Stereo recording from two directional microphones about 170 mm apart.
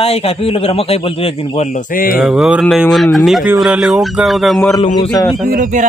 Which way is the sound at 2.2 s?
5° right (ahead or behind).